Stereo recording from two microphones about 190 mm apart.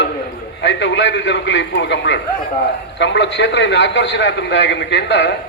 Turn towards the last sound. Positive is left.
turn(degrees=65)  # may be behind; listen again after turning